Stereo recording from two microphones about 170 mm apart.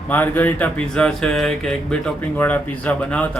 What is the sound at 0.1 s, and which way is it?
Speech, 10° left (ahead or behind).